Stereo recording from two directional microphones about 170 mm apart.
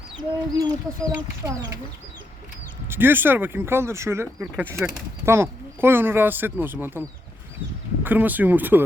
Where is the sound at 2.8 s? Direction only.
15° right (ahead or behind).